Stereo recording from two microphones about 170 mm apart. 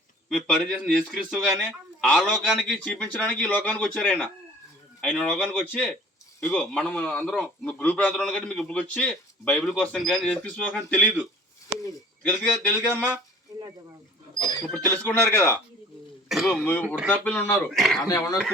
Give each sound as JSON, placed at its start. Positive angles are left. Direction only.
{"t": 0.3, "sound": "a man's voice", "side_deg": 5}
{"t": 12.2, "sound": "speech", "side_deg": 10}
{"t": 14.3, "sound": "speech", "side_deg": 25}
{"t": 14.7, "sound": "speech", "side_deg": 10}
{"t": 16.3, "sound": "a man's voice", "side_deg": 0}
{"t": 17.2, "sound": "speech", "side_deg": 10}
{"t": 17.7, "sound": "a man's voice", "side_deg": 0}
{"t": 18.0, "sound": "speech", "side_deg": 20}